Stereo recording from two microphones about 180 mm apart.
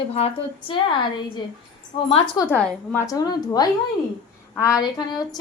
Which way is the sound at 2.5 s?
5° left (ahead or behind).